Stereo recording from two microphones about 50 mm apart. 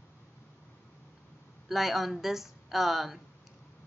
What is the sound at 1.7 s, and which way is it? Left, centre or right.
A woman's voice, centre.